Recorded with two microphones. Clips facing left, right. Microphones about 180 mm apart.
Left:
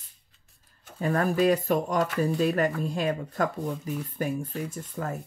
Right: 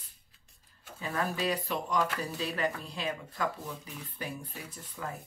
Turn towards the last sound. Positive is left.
turn(degrees=45)  # may be behind; listen again after turning